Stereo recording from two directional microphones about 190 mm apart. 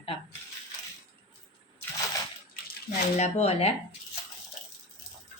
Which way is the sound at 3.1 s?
35° left (ahead or behind).